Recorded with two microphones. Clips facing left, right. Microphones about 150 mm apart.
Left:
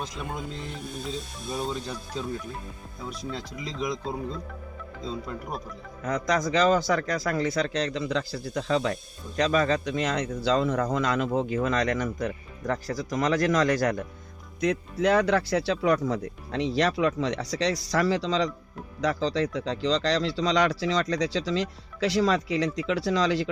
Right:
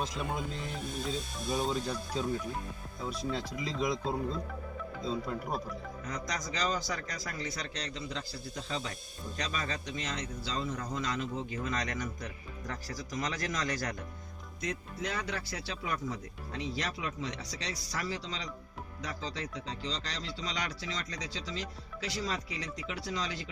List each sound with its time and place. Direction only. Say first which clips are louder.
1.0 s speech: left 1 dB; centre (ahead or behind)
3.1 s speech: even; 10° right (ahead or behind)
6.1 s speech: left 14 dB; 65° left (ahead or behind); by 9.0 s 85° left
9.4 s a man's voice: left 14 dB; 60° left (ahead or behind)
14.6 s speech: left 13 dB; 80° left